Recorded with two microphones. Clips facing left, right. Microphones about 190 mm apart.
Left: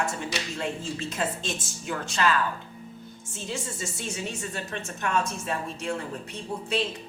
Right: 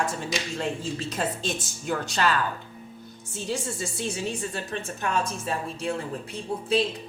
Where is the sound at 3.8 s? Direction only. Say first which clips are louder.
Right 3 dB; 35° right (ahead or behind).